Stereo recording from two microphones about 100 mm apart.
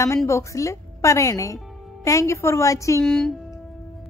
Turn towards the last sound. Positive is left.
turn(degrees=5)  # may be behind; listen again after turning